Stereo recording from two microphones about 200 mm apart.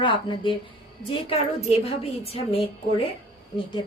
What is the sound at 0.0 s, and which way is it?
Speech, 25° left (ahead or behind).